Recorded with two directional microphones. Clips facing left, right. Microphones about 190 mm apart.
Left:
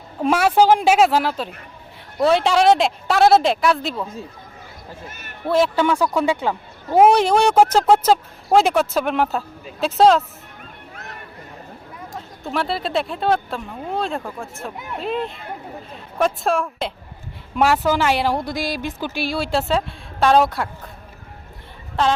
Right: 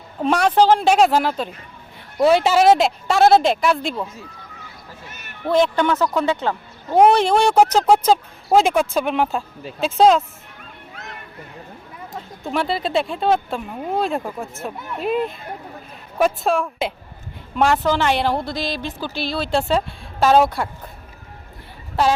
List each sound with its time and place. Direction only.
0.2 s speech: 5° left (ahead or behind)
5.5 s a woman's voice: 5° left (ahead or behind)
12.1 s speech: 5° right (ahead or behind)
14.0 s a woman's voice: 15° right (ahead or behind)